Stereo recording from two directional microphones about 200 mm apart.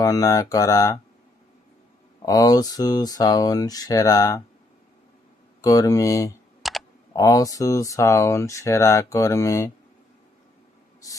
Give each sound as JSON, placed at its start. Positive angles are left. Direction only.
{"t": 0.0, "sound": "speech", "side_deg": 15}
{"t": 2.2, "sound": "speech", "side_deg": 15}
{"t": 5.6, "sound": "speech", "side_deg": 15}
{"t": 6.6, "sound": "computer keyboard", "side_deg": 0}
{"t": 7.2, "sound": "speech", "side_deg": 15}